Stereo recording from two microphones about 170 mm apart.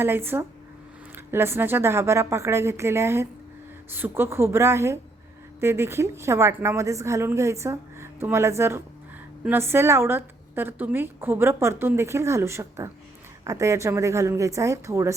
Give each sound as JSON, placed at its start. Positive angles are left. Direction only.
{"t": 0.0, "sound": "a woman's voice", "side_deg": -15}